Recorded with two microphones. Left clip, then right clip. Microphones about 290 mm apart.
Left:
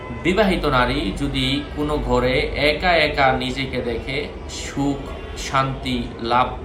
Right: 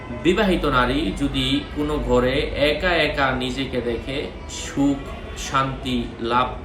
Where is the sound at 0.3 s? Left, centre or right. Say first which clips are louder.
Left 4 dB; centre.